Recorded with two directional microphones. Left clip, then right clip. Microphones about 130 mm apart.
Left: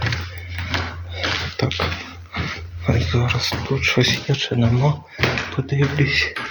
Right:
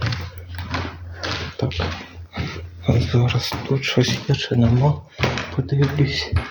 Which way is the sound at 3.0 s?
35° right (ahead or behind).